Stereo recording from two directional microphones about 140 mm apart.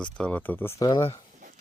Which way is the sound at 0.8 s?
30° left (ahead or behind).